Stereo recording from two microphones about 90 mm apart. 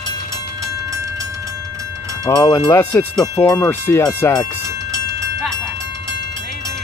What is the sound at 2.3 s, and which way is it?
Speech, 45° left (ahead or behind).